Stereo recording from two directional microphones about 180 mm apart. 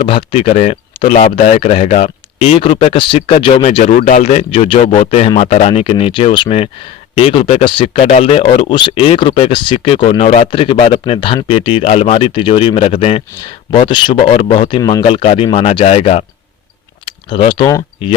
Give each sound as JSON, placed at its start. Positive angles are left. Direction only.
{"t": 0.0, "sound": "speech", "side_deg": 30}